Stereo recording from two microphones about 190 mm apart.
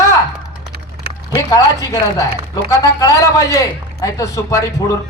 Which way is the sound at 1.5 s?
20° left (ahead or behind).